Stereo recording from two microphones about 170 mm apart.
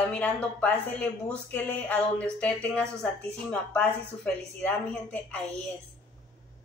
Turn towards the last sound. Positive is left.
turn(degrees=5)  # may be behind; listen again after turning